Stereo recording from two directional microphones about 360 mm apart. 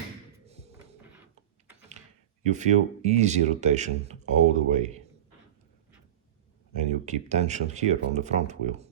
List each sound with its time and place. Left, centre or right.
2.5 s speech: centre
6.7 s speech: centre